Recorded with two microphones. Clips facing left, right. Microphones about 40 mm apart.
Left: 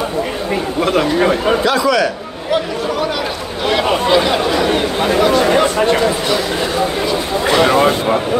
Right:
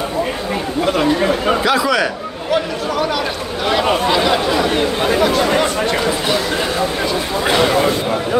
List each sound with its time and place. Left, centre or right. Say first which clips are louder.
1.5 s a man's voice: left 1 dB; centre
3.6 s a sound: left 1 dB; centre
4.2 s chatter: even; centre